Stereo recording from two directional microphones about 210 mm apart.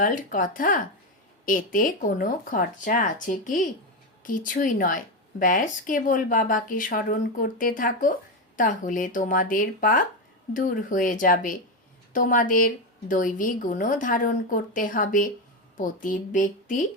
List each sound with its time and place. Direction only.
0.0 s a woman's voice: 40° left (ahead or behind)